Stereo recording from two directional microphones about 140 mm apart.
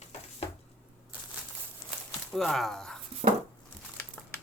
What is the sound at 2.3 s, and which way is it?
Speech, centre (ahead or behind).